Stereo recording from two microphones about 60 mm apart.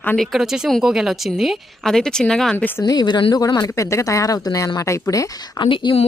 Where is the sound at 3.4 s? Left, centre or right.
Left.